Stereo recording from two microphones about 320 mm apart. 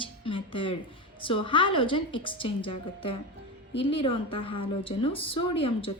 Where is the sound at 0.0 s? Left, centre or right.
Centre.